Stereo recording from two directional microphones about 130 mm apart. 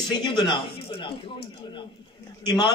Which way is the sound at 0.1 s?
35° left (ahead or behind).